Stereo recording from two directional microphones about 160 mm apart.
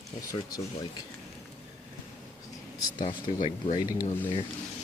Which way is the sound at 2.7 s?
25° left (ahead or behind).